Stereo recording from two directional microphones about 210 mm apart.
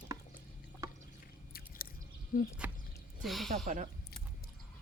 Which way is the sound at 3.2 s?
Centre (ahead or behind).